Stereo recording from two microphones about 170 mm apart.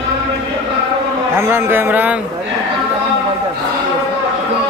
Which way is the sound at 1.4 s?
15° right (ahead or behind).